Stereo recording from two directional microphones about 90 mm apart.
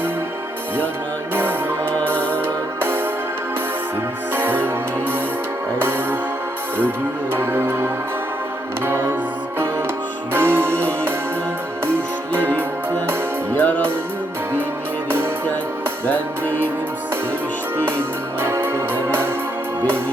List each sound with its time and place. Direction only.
1.3 s music: 25° right (ahead or behind)
4.4 s music: 25° right (ahead or behind)
7.3 s music: 25° right (ahead or behind)
10.3 s music: 25° right (ahead or behind)
13.5 s music: 20° left (ahead or behind)
16.0 s music: 20° left (ahead or behind)
17.7 s music: 25° right (ahead or behind)